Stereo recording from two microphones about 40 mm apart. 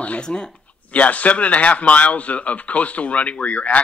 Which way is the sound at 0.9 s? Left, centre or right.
Left.